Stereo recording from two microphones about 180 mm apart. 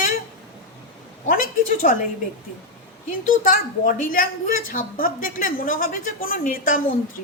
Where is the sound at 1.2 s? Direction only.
50° left (ahead or behind).